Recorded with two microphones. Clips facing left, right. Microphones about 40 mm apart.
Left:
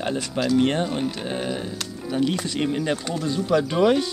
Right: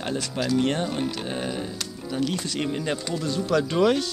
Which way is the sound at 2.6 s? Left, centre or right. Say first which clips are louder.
Left 3 dB; centre.